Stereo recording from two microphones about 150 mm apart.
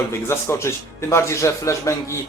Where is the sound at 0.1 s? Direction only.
15° left (ahead or behind).